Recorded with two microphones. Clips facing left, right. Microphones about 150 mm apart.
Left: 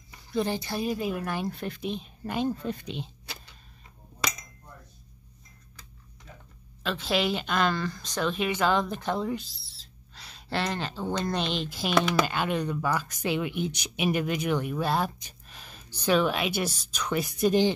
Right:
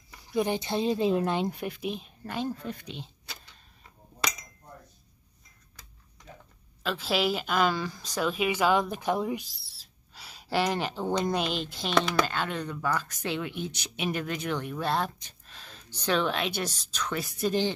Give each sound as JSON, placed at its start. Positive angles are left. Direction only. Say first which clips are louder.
{"t": 0.3, "sound": "a woman's voice", "louder": "right 1 dB", "side_deg": -15}
{"t": 2.2, "sound": "speech", "louder": "left 4 dB", "side_deg": 15}
{"t": 6.8, "sound": "a woman's voice", "louder": "even", "side_deg": -5}